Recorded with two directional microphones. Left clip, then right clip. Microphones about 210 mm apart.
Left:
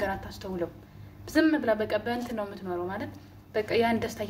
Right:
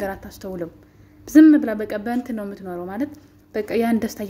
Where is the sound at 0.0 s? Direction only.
50° right (ahead or behind).